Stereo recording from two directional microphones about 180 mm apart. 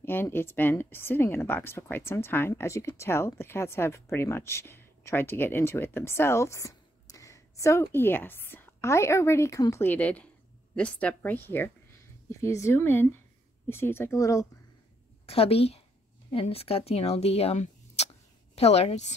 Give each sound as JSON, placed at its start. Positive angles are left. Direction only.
{"t": 0.0, "sound": "speech", "side_deg": 10}
{"t": 15.2, "sound": "a woman's voice", "side_deg": 35}